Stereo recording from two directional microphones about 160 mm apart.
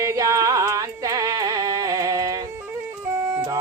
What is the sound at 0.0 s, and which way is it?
Music, 20° right (ahead or behind).